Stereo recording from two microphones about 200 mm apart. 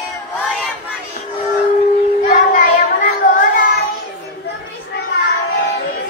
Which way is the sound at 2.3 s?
40° left (ahead or behind).